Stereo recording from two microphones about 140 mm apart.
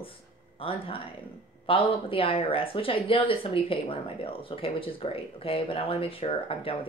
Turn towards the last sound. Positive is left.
turn(degrees=40)  # may be behind; listen again after turning